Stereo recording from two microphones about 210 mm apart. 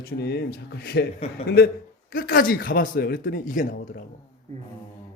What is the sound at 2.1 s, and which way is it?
Speech, 45° left (ahead or behind).